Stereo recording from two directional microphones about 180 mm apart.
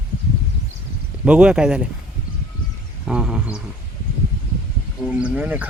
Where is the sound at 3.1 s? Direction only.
5° right (ahead or behind).